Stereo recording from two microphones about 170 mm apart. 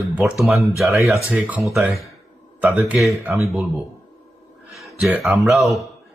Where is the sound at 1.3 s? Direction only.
10° right (ahead or behind).